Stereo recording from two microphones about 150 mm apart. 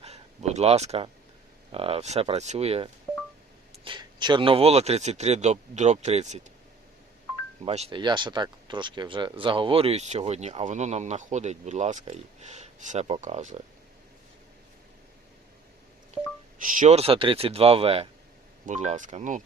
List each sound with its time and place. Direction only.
0.0 s a sound: 45° right (ahead or behind)
1.7 s speech: 40° right (ahead or behind)
3.8 s speech: 30° right (ahead or behind); by 6.4 s 50° right (ahead or behind)
7.6 s speech: 45° right (ahead or behind)
7.9 s speech: 30° right (ahead or behind); by 13.6 s 55° right (ahead or behind)
16.6 s speech: 60° right (ahead or behind); by 18.1 s 40° right (ahead or behind)
18.6 s speech: 55° right (ahead or behind)